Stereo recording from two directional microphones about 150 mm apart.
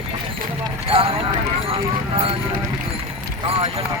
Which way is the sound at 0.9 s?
40° right (ahead or behind).